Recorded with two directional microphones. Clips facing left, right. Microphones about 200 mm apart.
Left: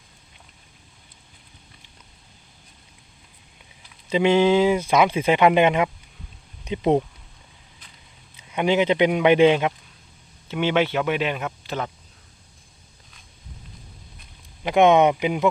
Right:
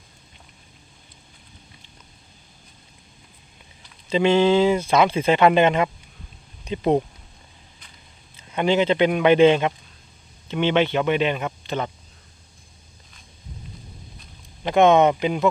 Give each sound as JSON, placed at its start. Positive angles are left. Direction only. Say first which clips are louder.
{"t": 4.1, "sound": "speech", "louder": "even", "side_deg": 10}
{"t": 8.4, "sound": "speech", "louder": "even", "side_deg": 10}
{"t": 14.6, "sound": "speech", "louder": "even", "side_deg": 10}